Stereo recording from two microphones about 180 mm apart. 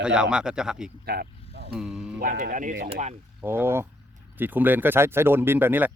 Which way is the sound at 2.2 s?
50° right (ahead or behind).